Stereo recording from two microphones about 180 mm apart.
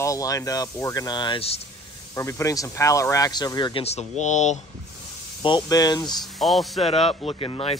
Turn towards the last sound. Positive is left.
turn(degrees=30)  # may be behind; listen again after turning